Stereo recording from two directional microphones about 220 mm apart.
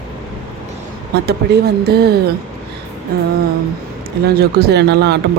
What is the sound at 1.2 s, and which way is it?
Speech, 45° right (ahead or behind).